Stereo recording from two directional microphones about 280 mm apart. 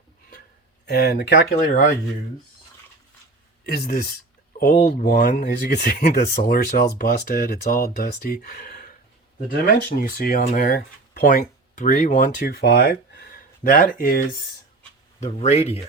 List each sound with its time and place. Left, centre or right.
0.9 s speech: left
4.5 s speech: left